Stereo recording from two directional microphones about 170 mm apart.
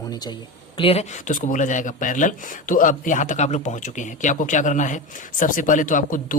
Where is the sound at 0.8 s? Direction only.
35° left (ahead or behind).